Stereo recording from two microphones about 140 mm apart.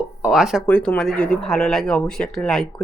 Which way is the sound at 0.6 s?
10° left (ahead or behind).